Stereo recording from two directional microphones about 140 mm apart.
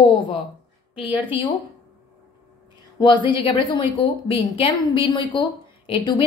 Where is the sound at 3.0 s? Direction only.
35° left (ahead or behind).